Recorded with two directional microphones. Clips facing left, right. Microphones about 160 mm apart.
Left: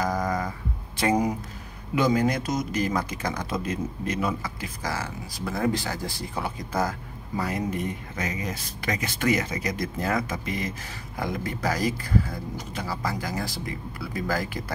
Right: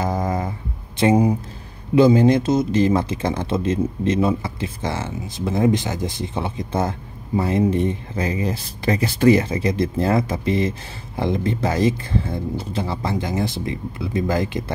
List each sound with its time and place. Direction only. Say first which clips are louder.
0.0 s mantra: right 3 dB; 25° right (ahead or behind)
2.0 s speech: right 9 dB; 25° right (ahead or behind)